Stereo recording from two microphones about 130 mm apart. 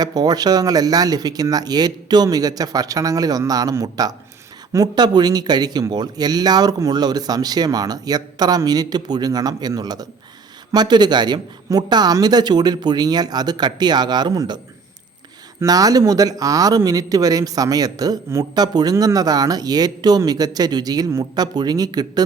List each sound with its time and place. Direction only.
0.0 s speech: 30° right (ahead or behind)
15.6 s speech: 30° right (ahead or behind)